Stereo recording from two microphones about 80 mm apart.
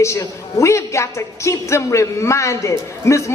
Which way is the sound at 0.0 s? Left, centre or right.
Left.